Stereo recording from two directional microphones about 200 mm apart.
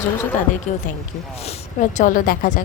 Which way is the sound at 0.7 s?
35° left (ahead or behind).